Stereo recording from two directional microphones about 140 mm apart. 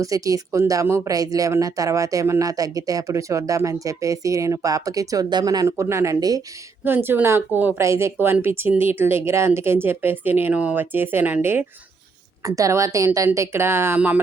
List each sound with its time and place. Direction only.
0.0 s speech: 25° right (ahead or behind)
6.8 s speech: 15° right (ahead or behind)